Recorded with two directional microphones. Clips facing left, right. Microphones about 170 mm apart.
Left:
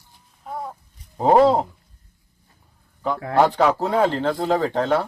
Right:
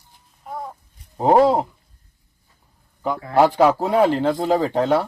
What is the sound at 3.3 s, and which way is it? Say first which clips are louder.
Speech: right 2 dB; 10° right (ahead or behind).